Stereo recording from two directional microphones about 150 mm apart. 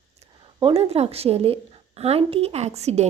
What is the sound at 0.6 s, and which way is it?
A woman's voice, 40° right (ahead or behind).